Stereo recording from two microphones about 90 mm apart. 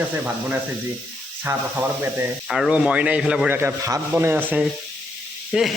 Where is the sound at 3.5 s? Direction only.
25° right (ahead or behind).